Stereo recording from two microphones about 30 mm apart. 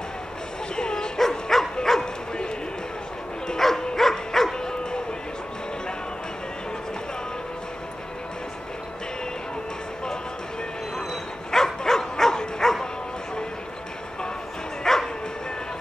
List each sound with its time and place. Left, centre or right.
0.7 s bow-wow: left
1.5 s dog: centre
1.9 s bow-wow: centre
3.5 s dog: centre
11.5 s bow-wow: centre
14.8 s bow-wow: centre